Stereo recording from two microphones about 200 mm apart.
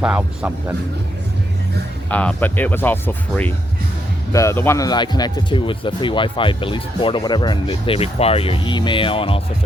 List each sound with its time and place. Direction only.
0.0 s speech: 5° right (ahead or behind)
2.0 s speech: 5° left (ahead or behind); by 9.4 s 25° left (ahead or behind)